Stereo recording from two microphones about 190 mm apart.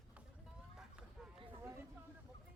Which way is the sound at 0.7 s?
5° right (ahead or behind).